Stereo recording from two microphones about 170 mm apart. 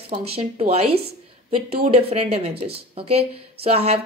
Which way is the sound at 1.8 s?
35° right (ahead or behind).